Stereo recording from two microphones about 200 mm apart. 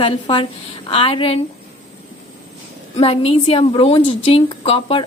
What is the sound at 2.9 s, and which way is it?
A woman's voice, 30° left (ahead or behind).